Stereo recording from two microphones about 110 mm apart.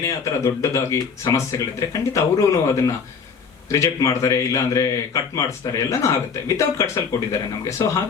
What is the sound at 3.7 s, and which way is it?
A man's voice, 30° left (ahead or behind).